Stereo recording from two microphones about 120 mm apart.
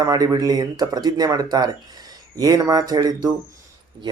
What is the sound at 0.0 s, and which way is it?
A man's voice, 30° right (ahead or behind).